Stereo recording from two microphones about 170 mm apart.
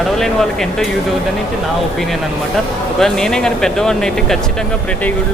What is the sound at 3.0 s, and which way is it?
Speech, 5° left (ahead or behind).